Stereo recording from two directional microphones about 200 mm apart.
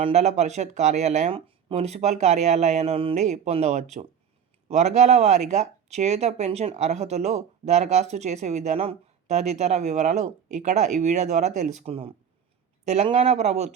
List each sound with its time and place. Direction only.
0.0 s speech: 35° right (ahead or behind)